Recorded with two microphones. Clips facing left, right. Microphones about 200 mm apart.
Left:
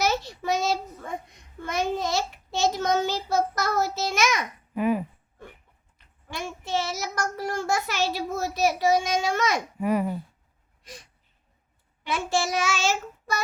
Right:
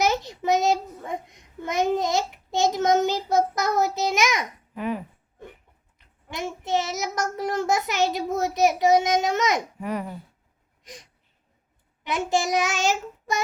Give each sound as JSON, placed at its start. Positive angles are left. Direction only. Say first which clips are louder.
{"t": 0.0, "sound": "a child's voice", "louder": "right 2 dB", "side_deg": -20}
{"t": 4.7, "sound": "speech", "louder": "left 5 dB", "side_deg": 10}
{"t": 6.3, "sound": "a child's voice", "louder": "right 3 dB", "side_deg": -20}
{"t": 9.8, "sound": "speech", "louder": "left 5 dB", "side_deg": 10}
{"t": 10.8, "sound": "a sound", "louder": "right 1 dB", "side_deg": -15}
{"t": 12.0, "sound": "a child's voice", "louder": "right 2 dB", "side_deg": -15}